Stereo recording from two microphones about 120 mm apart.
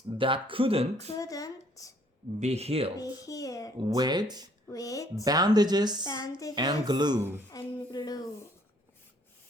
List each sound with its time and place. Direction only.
0.2 s speech: 45° right (ahead or behind)
1.2 s speech: 30° left (ahead or behind)
2.4 s speech: 60° right (ahead or behind)
3.0 s a child's voice: 30° left (ahead or behind)
3.8 s speech: 40° right (ahead or behind)
4.7 s a child's voice: 30° left (ahead or behind)
5.2 s speech: 35° right (ahead or behind)
6.1 s a woman's voice: 30° left (ahead or behind)
6.5 s speech: 40° right (ahead or behind)
7.2 s speech: 20° right (ahead or behind)
7.5 s speech: 35° left (ahead or behind)